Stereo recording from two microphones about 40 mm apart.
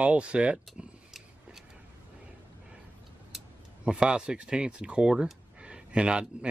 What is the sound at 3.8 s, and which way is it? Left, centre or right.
Speech, right.